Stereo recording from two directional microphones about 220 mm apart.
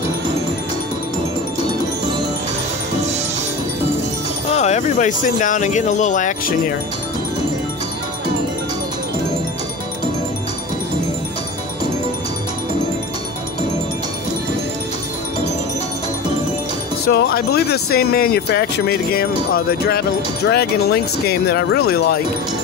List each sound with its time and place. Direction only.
4.5 s speech: 30° left (ahead or behind)
17.1 s speech: 45° left (ahead or behind)